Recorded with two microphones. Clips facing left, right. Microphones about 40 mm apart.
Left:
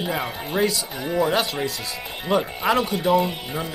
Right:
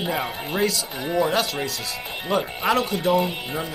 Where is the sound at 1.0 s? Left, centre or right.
Centre.